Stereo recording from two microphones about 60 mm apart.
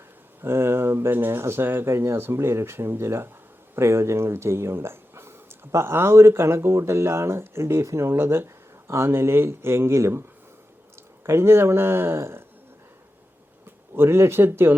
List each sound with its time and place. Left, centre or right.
0.4 s speech: right
11.3 s speech: right
13.9 s speech: right